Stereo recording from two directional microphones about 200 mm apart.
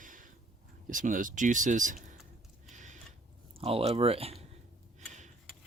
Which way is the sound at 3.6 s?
30° right (ahead or behind).